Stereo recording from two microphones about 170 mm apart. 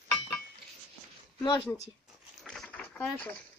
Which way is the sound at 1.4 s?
25° left (ahead or behind).